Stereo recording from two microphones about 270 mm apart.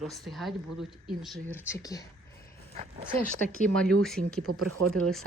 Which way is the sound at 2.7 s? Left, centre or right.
Right.